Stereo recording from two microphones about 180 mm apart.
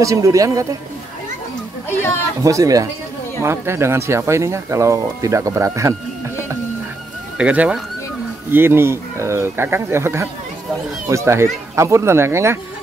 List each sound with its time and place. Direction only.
0.0 s speech: 20° right (ahead or behind)
1.9 s speech: 15° left (ahead or behind)
2.4 s speech: 20° right (ahead or behind)
7.3 s speech: 5° right (ahead or behind)